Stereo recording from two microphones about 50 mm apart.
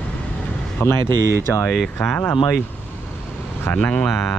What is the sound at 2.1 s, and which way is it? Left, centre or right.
Speech, left.